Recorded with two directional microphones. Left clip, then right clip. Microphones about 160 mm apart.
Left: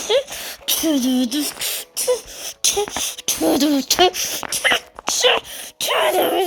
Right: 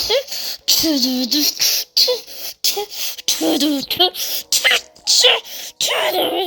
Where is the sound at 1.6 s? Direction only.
20° right (ahead or behind).